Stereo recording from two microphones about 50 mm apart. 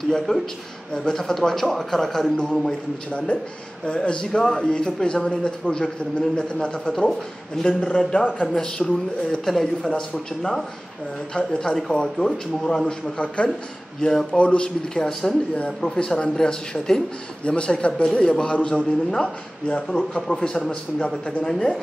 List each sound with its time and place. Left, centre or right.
0.3 s a man's voice: centre
3.1 s a man's voice: left
6.9 s a man's voice: centre; by 8.5 s left
8.5 s a man's voice: centre
14.3 s a man's voice: left
21.5 s a man's voice: centre